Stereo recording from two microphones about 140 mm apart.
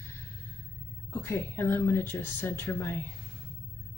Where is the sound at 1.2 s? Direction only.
20° left (ahead or behind).